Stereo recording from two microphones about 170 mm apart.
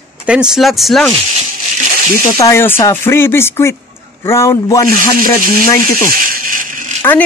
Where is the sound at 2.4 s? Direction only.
15° left (ahead or behind).